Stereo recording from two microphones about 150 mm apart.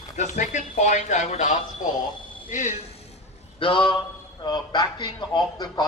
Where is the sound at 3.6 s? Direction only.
35° left (ahead or behind).